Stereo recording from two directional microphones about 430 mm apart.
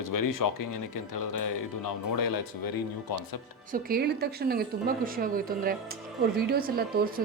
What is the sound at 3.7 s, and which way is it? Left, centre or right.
A woman's voice, right.